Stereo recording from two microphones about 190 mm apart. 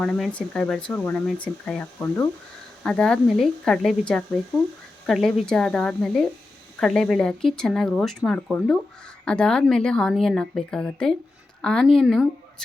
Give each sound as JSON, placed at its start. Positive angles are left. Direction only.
{"t": 0.0, "sound": "speech", "side_deg": 5}
{"t": 5.0, "sound": "a woman's voice", "side_deg": 0}